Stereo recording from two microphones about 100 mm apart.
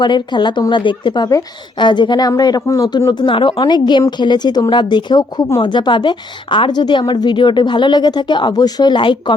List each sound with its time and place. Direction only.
0.0 s a woman's voice: 50° left (ahead or behind)
3.1 s a woman's voice: 50° left (ahead or behind)